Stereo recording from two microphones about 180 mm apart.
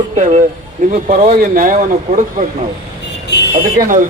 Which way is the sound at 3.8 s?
45° right (ahead or behind).